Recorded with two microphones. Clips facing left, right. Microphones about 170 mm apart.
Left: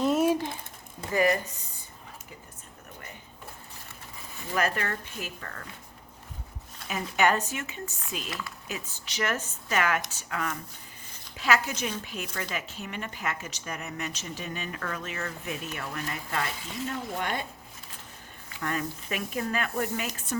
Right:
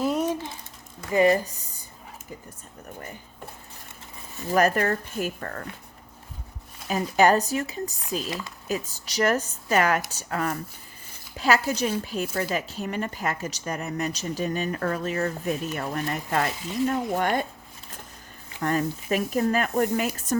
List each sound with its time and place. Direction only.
0.0 s a sound: 5° left (ahead or behind)
1.1 s speech: 25° right (ahead or behind)
4.4 s speech: 40° right (ahead or behind)
6.8 s a woman's voice: 35° right (ahead or behind)
18.6 s a woman's voice: 35° right (ahead or behind)